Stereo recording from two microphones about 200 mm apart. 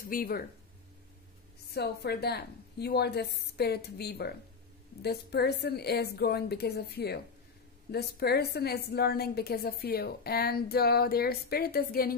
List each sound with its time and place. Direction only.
0.0 s a woman's voice: 45° left (ahead or behind)
1.7 s a woman's voice: 55° left (ahead or behind)